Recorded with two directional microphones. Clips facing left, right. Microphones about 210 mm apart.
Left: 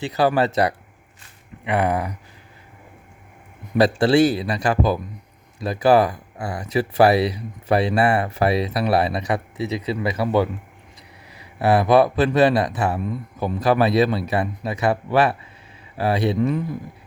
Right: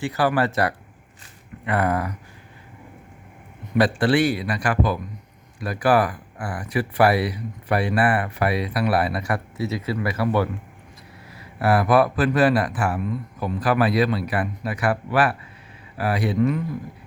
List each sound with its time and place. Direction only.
0.0 s speech: 20° left (ahead or behind)
3.8 s speech: 25° left (ahead or behind)